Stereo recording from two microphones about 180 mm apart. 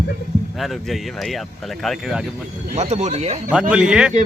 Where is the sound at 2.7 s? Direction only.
40° right (ahead or behind).